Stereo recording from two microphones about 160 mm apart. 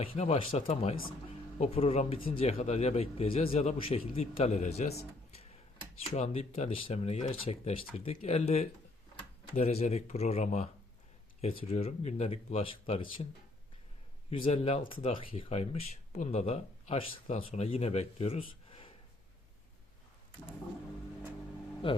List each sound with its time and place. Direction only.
0.0 s speech: 40° left (ahead or behind)
14.3 s speech: 40° left (ahead or behind)
21.8 s speech: 35° left (ahead or behind)